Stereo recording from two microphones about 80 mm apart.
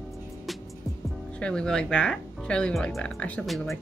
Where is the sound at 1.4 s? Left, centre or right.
Centre.